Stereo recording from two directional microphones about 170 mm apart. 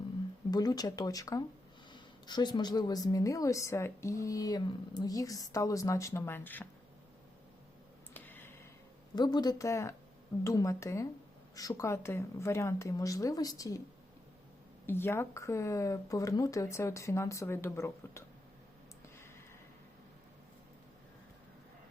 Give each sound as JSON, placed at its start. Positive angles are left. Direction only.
{"t": 0.5, "sound": "a woman's voice", "side_deg": 25}
{"t": 8.1, "sound": "a sound", "side_deg": 10}
{"t": 9.1, "sound": "a woman's voice", "side_deg": 25}
{"t": 14.8, "sound": "speech", "side_deg": 15}